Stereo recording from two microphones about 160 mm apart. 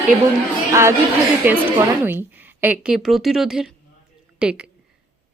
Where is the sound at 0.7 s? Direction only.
15° right (ahead or behind).